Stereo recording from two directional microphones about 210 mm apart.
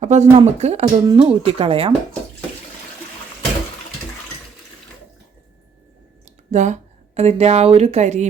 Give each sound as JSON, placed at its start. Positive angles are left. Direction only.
{"t": 0.0, "sound": "speech", "side_deg": -35}
{"t": 6.5, "sound": "speech", "side_deg": -35}